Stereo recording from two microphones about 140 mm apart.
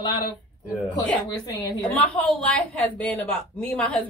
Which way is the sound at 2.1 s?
10° left (ahead or behind).